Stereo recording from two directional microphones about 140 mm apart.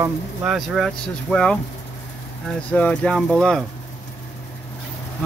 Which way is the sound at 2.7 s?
10° left (ahead or behind).